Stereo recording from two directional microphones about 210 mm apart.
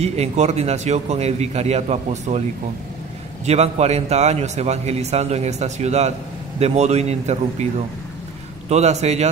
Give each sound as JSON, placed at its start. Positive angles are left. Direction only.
{"t": 0.0, "sound": "a man's voice", "side_deg": -30}
{"t": 3.4, "sound": "a man's voice", "side_deg": -30}
{"t": 8.6, "sound": "a man's voice", "side_deg": -30}